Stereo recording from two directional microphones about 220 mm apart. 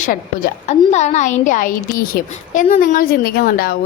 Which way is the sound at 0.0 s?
35° left (ahead or behind).